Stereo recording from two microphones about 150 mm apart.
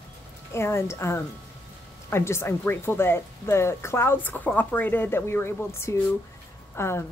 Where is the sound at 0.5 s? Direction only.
15° left (ahead or behind).